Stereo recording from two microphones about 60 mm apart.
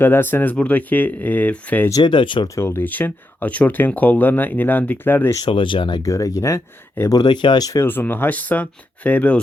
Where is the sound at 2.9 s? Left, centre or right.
Left.